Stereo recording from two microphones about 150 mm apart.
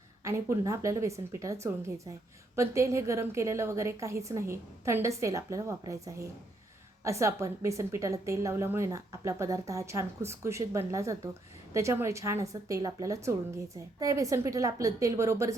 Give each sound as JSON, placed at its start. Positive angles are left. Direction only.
{"t": 0.3, "sound": "a woman's voice", "side_deg": -20}